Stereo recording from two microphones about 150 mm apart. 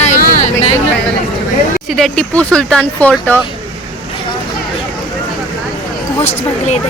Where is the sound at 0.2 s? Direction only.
75° left (ahead or behind).